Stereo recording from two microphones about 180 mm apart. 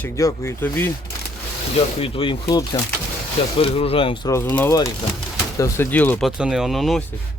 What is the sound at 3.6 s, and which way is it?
Speech, 35° left (ahead or behind).